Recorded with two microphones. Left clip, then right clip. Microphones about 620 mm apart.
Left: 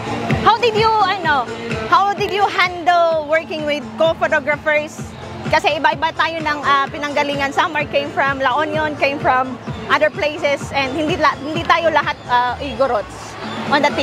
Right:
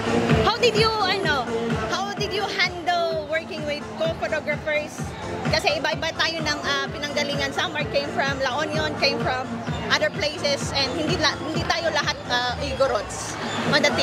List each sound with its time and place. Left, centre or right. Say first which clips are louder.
0.5 s music: left 10 dB; left
1.9 s music: left 11 dB; left
5.5 s speech: left 8 dB; left